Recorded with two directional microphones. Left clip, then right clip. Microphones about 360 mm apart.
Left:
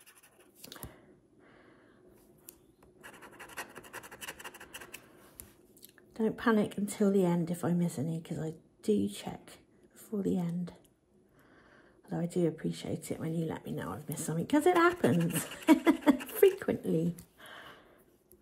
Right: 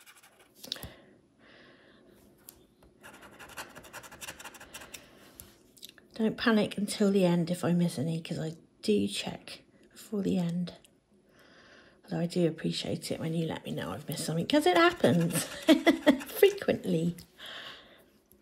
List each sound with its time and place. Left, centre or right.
0.7 s a sound: centre
3.0 s scratch: centre
6.1 s speech: centre
11.7 s speech: centre